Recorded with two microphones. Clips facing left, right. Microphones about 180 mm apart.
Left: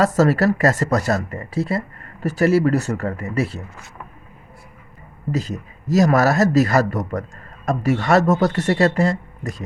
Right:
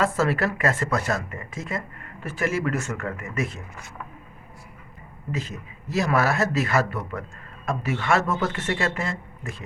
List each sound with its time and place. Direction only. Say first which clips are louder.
0.0 s speech: left 7 dB; 40° left (ahead or behind)
5.3 s speech: left 7 dB; 40° left (ahead or behind)